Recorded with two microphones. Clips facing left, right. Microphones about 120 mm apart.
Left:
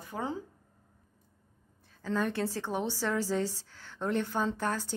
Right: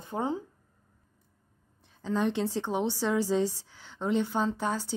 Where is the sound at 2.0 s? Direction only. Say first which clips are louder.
Right 3 dB; 15° right (ahead or behind).